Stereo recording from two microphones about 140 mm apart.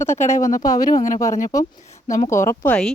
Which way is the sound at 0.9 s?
70° left (ahead or behind).